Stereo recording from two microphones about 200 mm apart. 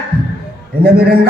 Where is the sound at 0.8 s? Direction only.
50° right (ahead or behind).